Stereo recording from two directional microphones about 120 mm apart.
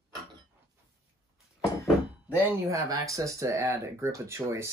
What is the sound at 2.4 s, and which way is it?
Speech, 25° right (ahead or behind).